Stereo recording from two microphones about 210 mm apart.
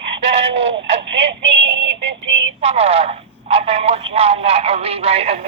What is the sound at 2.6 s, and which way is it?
Speech, 30° right (ahead or behind).